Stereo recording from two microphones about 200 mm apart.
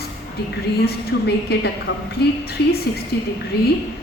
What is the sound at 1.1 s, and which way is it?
Speech, 55° left (ahead or behind).